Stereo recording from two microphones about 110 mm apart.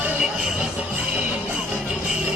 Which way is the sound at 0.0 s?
10° right (ahead or behind).